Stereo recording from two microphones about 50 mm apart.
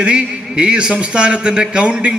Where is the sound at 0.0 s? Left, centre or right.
Right.